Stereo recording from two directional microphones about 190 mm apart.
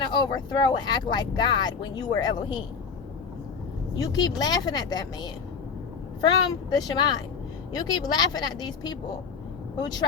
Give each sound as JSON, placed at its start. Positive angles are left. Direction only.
{"t": 0.1, "sound": "speech", "side_deg": 20}
{"t": 3.9, "sound": "speech", "side_deg": 20}